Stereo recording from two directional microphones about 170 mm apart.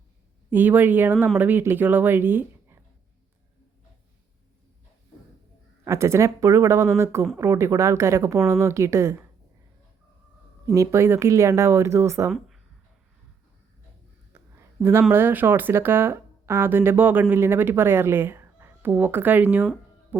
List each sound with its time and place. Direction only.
0.5 s speech: 10° right (ahead or behind)
5.8 s speech: 15° right (ahead or behind)
10.8 s speech: 15° right (ahead or behind)
14.3 s a sound: 15° right (ahead or behind)
15.1 s speech: 10° right (ahead or behind)